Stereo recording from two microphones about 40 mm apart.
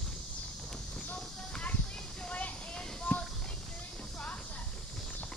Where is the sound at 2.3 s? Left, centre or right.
Left.